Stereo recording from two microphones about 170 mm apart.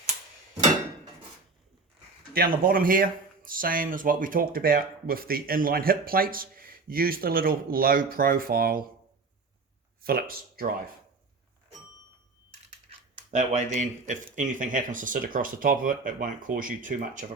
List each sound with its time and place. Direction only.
2.3 s speech: 60° right (ahead or behind)
10.0 s speech: 60° right (ahead or behind)
13.3 s speech: 45° right (ahead or behind)